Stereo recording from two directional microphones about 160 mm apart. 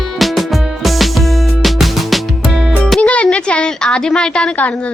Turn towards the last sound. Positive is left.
turn(degrees=10)  # may be behind; listen again after turning